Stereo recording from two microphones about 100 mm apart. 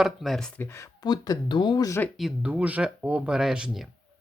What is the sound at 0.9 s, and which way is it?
Speech, 45° left (ahead or behind).